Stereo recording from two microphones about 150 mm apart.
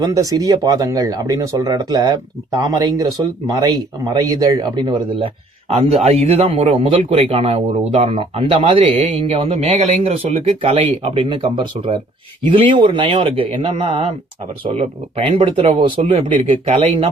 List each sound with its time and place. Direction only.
0.0 s speech: 25° right (ahead or behind); by 17.1 s 40° right (ahead or behind)